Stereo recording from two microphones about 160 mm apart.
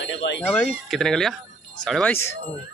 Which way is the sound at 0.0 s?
90° left.